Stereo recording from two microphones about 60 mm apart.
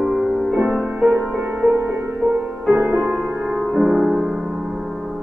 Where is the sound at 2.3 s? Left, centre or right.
Right.